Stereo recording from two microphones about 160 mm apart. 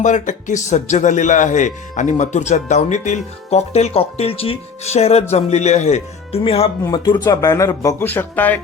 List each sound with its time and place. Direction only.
0.0 s speech: 50° left (ahead or behind)
6.8 s speech: 25° left (ahead or behind); by 8.6 s 10° left (ahead or behind)